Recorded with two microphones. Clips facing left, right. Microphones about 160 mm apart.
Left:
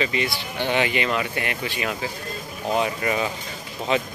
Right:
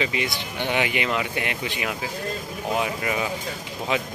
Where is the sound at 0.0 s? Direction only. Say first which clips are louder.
Left 1 dB; 15° right (ahead or behind).